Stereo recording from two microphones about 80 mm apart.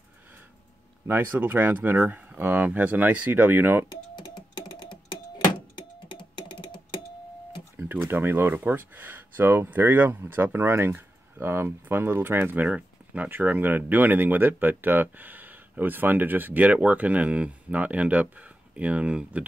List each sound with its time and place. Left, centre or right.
1.0 s speech: right
4.1 s a sound: left
5.8 s computer keyboard: left
7.7 s speech: right